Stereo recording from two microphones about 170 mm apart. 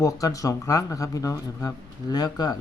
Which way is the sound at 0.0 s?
20° left (ahead or behind).